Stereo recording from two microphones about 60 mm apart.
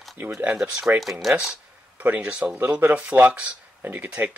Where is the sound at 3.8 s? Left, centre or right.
Right.